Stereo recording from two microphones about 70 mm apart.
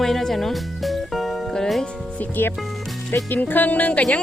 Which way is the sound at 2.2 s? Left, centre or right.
Left.